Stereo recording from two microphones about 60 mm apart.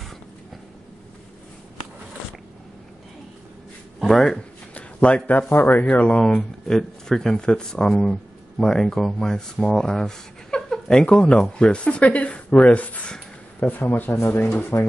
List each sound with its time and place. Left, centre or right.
4.0 s speech: centre
4.7 s a sound: left
5.5 s speech: left